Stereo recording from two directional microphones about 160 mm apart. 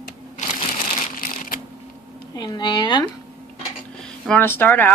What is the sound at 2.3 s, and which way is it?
Speech, 25° left (ahead or behind).